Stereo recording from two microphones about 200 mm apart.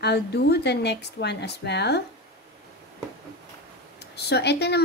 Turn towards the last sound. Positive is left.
turn(degrees=55)  # may be behind; listen again after turning